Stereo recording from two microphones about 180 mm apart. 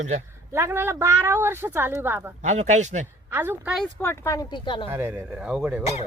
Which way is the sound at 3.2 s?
15° right (ahead or behind).